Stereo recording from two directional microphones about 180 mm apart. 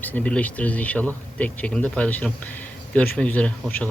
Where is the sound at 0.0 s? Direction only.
10° left (ahead or behind).